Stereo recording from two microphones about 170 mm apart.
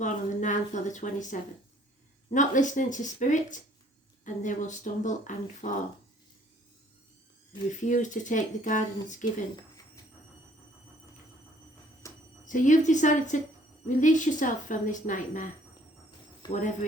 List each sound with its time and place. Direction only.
0.0 s a woman's voice: 45° left (ahead or behind)
7.7 s a woman's voice: 45° left (ahead or behind)
12.0 s a sound: 20° left (ahead or behind)
12.5 s a woman's voice: 45° left (ahead or behind)
16.5 s a woman's voice: 50° left (ahead or behind)